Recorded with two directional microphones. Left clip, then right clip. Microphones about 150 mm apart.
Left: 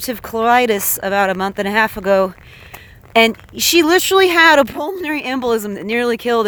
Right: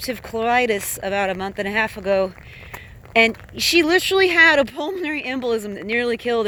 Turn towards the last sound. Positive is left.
turn(degrees=55)  # may be behind; listen again after turning